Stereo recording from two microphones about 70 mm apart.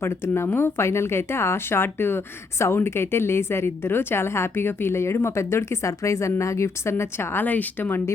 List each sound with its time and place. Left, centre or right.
0.0 s speech: left